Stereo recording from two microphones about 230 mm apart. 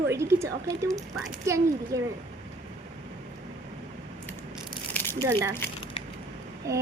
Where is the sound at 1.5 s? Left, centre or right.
Centre.